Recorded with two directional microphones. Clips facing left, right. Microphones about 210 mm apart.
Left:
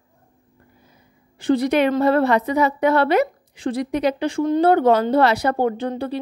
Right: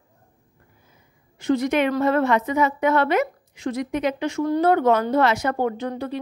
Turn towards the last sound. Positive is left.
turn(degrees=30)  # may be behind; listen again after turning